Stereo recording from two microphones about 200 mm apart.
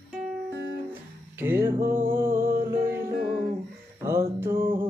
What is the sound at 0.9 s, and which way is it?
Music, 10° right (ahead or behind).